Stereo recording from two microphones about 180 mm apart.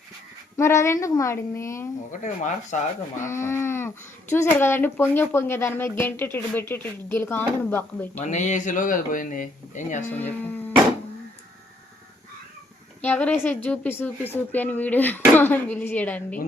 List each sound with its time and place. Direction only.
0.5 s speech: 15° left (ahead or behind)
2.2 s speech: 40° left (ahead or behind)
3.2 s speech: 15° left (ahead or behind)
8.2 s speech: 40° left (ahead or behind)
10.1 s speech: 10° left (ahead or behind)
13.0 s speech: 10° left (ahead or behind)